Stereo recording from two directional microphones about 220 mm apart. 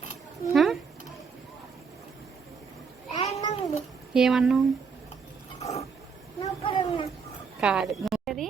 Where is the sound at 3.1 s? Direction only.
30° left (ahead or behind).